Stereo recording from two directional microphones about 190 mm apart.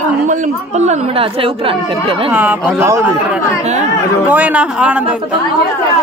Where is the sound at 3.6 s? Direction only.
35° right (ahead or behind).